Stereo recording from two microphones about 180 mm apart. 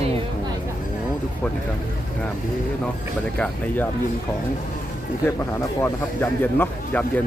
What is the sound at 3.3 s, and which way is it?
Speech, 5° left (ahead or behind).